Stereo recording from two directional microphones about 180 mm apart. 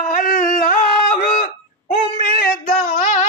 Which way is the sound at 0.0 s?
50° left (ahead or behind).